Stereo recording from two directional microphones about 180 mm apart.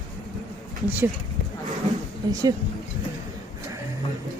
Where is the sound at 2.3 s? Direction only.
20° right (ahead or behind).